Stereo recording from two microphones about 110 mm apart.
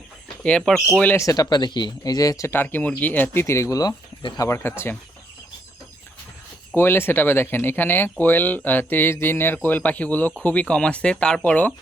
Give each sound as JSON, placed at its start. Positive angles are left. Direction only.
{"t": 0.4, "sound": "speech", "side_deg": 5}
{"t": 1.1, "sound": "speech", "side_deg": 30}
{"t": 2.5, "sound": "speech", "side_deg": 20}
{"t": 6.7, "sound": "speech", "side_deg": 20}